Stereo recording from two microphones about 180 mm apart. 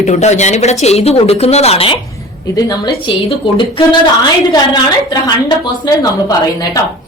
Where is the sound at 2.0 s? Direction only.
20° left (ahead or behind).